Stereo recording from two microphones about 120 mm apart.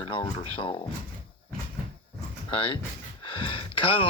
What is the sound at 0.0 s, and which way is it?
Speech, 45° left (ahead or behind).